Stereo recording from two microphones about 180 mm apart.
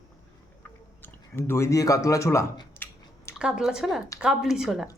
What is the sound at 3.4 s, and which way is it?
A woman's voice, 5° right (ahead or behind).